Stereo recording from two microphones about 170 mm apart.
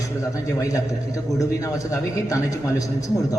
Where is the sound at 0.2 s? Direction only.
20° left (ahead or behind).